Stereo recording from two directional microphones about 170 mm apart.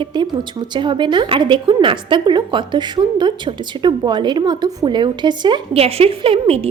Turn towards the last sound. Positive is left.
turn(degrees=-35)  # may be behind; listen again after turning